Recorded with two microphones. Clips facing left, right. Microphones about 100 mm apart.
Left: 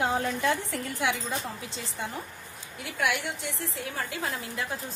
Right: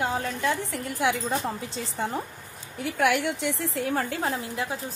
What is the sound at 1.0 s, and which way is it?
A woman's voice, 35° right (ahead or behind).